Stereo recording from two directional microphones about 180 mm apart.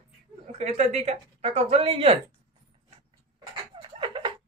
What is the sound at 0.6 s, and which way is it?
Speech, 40° right (ahead or behind).